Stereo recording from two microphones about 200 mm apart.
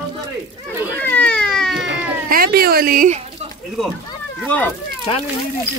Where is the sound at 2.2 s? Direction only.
45° right (ahead or behind).